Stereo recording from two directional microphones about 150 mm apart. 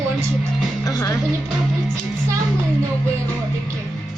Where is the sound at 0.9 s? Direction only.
20° left (ahead or behind).